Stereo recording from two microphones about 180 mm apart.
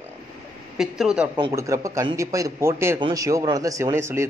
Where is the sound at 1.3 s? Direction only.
20° right (ahead or behind).